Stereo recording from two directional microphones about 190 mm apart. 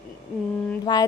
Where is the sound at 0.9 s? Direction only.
25° left (ahead or behind).